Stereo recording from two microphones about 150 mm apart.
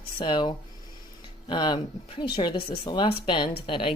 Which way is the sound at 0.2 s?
30° left (ahead or behind).